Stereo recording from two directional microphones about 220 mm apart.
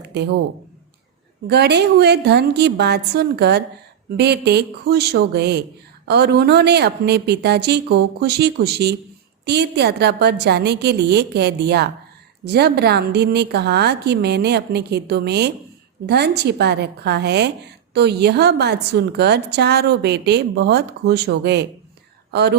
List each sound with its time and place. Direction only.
1.5 s a woman's voice: 50° right (ahead or behind)